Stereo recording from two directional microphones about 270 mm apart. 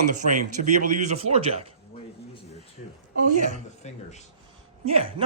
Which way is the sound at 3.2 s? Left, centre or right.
Right.